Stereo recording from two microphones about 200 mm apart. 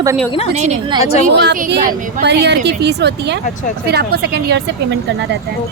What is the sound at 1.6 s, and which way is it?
A woman's voice, 45° right (ahead or behind).